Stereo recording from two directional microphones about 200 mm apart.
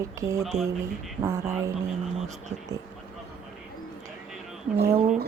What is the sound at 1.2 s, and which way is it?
Speech, 15° right (ahead or behind).